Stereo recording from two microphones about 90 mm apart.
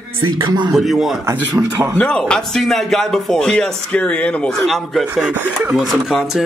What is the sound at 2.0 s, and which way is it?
Speech, 10° left (ahead or behind).